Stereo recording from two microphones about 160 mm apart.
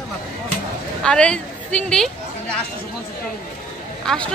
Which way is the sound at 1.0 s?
5° left (ahead or behind).